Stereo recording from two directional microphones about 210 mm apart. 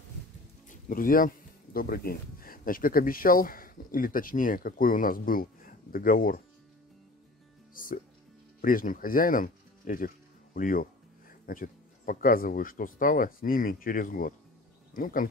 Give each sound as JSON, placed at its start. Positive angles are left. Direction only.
{"t": 0.7, "sound": "speech", "side_deg": 40}
{"t": 7.7, "sound": "music", "side_deg": 40}
{"t": 8.5, "sound": "speech", "side_deg": 40}